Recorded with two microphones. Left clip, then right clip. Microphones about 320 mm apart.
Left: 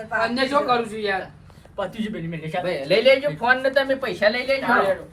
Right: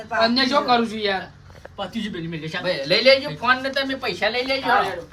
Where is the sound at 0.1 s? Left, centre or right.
Centre.